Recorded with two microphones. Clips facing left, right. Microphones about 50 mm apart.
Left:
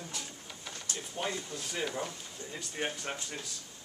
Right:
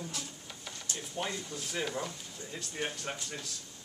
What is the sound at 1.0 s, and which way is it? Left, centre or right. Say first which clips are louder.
Speech: left 1 dB; centre.